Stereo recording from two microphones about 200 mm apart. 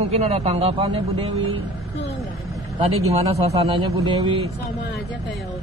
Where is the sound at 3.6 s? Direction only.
25° right (ahead or behind).